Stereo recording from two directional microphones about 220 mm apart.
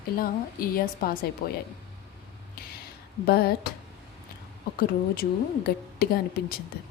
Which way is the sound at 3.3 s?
45° left (ahead or behind).